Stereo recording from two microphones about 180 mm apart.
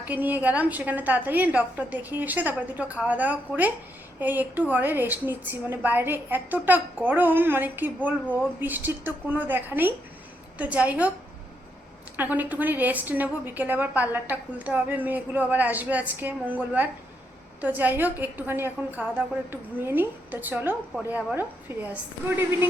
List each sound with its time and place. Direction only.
0.0 s a woman's voice: 10° right (ahead or behind)
12.1 s a woman's voice: 10° right (ahead or behind)